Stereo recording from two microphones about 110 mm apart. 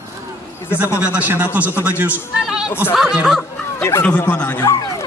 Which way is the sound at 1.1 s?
15° right (ahead or behind).